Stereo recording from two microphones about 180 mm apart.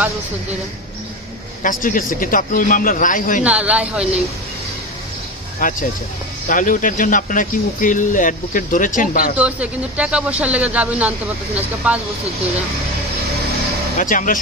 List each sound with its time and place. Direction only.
1.6 s speech: 50° left (ahead or behind)
3.4 s speech: 5° right (ahead or behind)
5.6 s speech: 50° left (ahead or behind)
9.4 s speech: 5° right (ahead or behind)
13.9 s speech: 50° left (ahead or behind)